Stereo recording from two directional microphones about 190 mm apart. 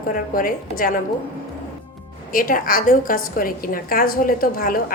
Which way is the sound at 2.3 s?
45° left (ahead or behind).